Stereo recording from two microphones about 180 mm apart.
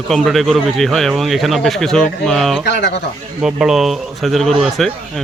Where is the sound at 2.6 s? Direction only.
75° left (ahead or behind).